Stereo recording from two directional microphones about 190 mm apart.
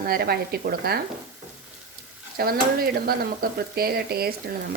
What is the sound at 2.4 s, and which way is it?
A woman's voice, 50° right (ahead or behind).